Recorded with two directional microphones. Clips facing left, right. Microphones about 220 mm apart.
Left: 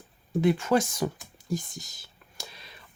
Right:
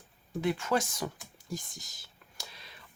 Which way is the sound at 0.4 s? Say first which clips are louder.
Left 6 dB; 25° left (ahead or behind).